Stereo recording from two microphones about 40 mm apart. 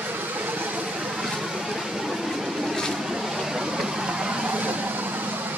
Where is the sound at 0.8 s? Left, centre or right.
Right.